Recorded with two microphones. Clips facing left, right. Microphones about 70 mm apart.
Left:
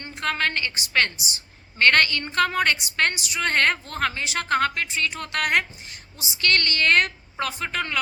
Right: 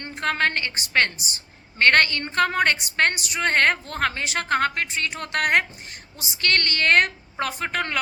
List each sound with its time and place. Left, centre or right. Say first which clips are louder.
0.0 s a woman's voice: right 2 dB; right